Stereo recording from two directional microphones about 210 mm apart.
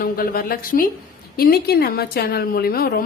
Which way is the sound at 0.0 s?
45° left (ahead or behind).